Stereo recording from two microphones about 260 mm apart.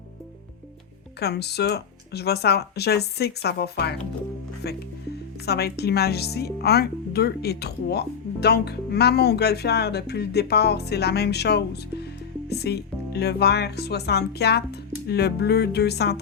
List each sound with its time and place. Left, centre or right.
1.2 s speech: left